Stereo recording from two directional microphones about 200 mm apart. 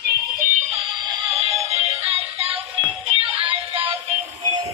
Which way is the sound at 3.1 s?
30° right (ahead or behind).